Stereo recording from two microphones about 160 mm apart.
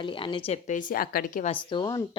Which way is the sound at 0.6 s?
55° left (ahead or behind).